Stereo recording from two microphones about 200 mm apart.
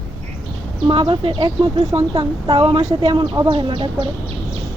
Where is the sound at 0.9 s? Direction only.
25° right (ahead or behind).